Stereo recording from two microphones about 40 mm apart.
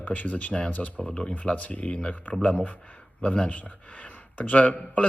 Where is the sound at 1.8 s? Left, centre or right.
Left.